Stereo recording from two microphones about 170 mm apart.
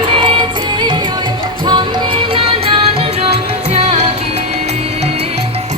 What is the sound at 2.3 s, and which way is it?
Music, 35° right (ahead or behind).